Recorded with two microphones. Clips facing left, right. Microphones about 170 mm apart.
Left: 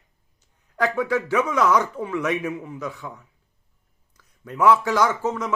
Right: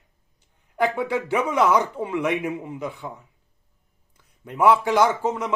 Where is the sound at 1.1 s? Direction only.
25° right (ahead or behind).